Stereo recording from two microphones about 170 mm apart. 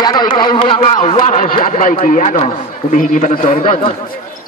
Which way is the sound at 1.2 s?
50° left (ahead or behind).